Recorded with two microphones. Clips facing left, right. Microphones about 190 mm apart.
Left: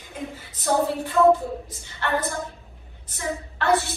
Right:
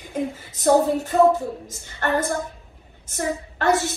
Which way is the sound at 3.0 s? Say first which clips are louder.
Right 4 dB; 45° right (ahead or behind).